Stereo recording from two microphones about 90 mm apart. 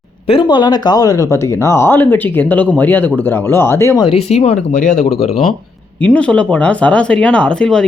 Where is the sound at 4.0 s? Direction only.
80° left.